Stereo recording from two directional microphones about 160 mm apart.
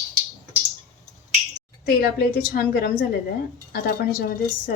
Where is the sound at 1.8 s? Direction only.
75° left (ahead or behind).